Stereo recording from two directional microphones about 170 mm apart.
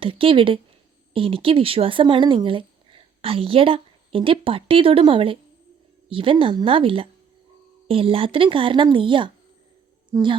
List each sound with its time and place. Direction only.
0.0 s a woman's voice: 30° right (ahead or behind)